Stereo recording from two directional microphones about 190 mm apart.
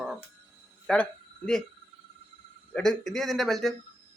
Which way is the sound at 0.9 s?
5° left (ahead or behind).